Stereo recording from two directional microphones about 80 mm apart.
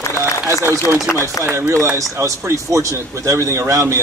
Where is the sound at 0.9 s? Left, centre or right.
Left.